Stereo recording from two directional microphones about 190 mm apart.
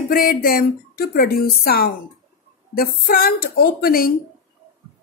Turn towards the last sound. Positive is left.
turn(degrees=50)  # may be behind; listen again after turning